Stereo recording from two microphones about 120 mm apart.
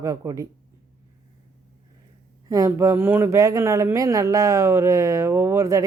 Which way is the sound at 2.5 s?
25° right (ahead or behind).